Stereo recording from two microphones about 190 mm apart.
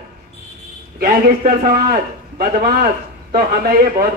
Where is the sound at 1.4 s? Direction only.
50° right (ahead or behind).